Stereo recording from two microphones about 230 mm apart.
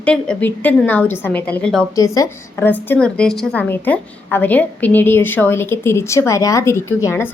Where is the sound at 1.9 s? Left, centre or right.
Centre.